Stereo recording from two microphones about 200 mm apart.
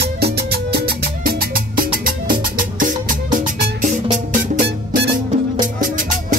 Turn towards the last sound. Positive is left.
turn(degrees=-55)  # may be behind; listen again after turning